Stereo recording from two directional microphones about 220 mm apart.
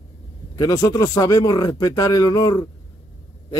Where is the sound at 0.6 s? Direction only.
15° left (ahead or behind).